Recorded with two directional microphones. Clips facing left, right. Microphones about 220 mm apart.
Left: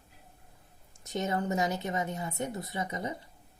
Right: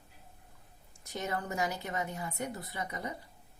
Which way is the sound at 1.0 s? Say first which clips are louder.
Left 5 dB; 20° left (ahead or behind).